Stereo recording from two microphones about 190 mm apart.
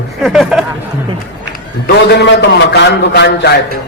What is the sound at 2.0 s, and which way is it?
A man's voice, 60° left (ahead or behind).